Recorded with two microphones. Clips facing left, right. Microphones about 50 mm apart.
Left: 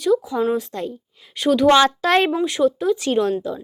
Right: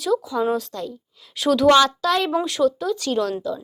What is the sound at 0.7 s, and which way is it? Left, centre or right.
Speech, left.